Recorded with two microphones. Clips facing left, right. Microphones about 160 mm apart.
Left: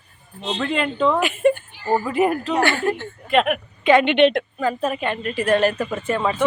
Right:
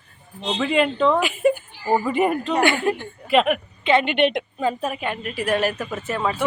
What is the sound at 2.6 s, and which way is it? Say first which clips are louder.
Speech: right 2 dB; 20° right (ahead or behind).